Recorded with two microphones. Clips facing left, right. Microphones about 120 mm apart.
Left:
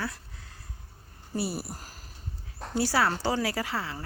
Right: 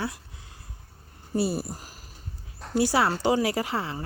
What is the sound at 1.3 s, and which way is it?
Speech, 25° right (ahead or behind).